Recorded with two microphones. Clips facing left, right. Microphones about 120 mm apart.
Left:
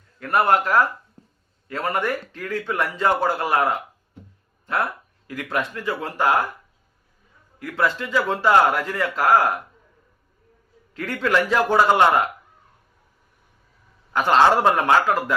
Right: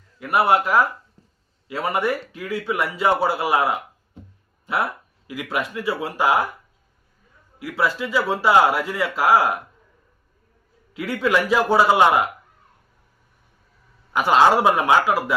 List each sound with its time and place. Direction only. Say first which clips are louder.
0.2 s speech: right 1 dB; 10° right (ahead or behind)
1.2 s a sound: left 5 dB; 55° left (ahead or behind)
1.6 s speech: right 2 dB; 10° right (ahead or behind)
7.6 s speech: even; 10° right (ahead or behind)
10.9 s speech: right 1 dB; 10° right (ahead or behind)
14.1 s speech: right 1 dB; 10° right (ahead or behind)